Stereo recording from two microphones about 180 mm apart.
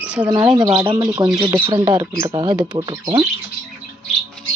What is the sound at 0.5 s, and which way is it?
Speech, 20° right (ahead or behind).